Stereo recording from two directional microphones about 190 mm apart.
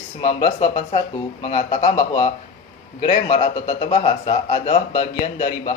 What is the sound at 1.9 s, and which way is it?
Speech, 20° left (ahead or behind).